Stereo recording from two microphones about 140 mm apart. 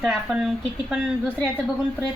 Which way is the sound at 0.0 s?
5° right (ahead or behind).